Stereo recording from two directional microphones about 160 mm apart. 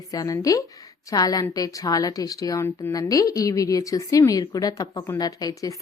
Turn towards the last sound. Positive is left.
turn(degrees=25)  # may be behind; listen again after turning